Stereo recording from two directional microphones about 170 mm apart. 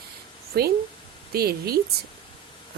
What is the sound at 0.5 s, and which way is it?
A woman's voice, 70° right (ahead or behind).